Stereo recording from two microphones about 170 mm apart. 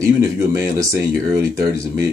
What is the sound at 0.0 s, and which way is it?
Speech, 20° right (ahead or behind).